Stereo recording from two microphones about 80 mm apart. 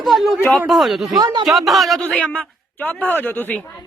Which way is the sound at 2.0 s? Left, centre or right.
Centre.